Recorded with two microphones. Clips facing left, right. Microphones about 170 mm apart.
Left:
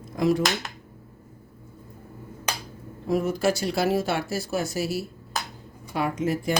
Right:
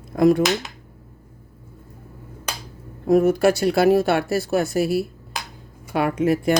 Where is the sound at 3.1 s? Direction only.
60° right (ahead or behind).